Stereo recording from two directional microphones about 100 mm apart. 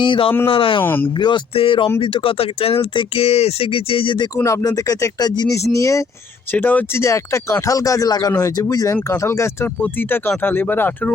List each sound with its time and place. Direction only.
0.0 s speech: 60° left (ahead or behind)
0.8 s speech: 20° left (ahead or behind)
1.5 s speech: 60° left (ahead or behind)
4.4 s speech: 35° left (ahead or behind)
6.5 s speech: 15° left (ahead or behind)
7.0 s speech: 30° left (ahead or behind)